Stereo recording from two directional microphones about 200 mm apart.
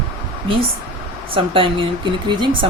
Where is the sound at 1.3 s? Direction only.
25° right (ahead or behind).